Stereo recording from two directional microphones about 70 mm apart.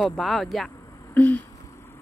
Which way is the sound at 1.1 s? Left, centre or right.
Left.